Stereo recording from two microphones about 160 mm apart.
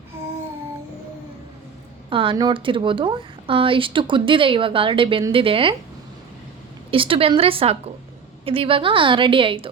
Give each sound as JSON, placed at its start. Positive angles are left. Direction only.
{"t": 2.0, "sound": "speech", "side_deg": -35}
{"t": 6.9, "sound": "speech", "side_deg": -35}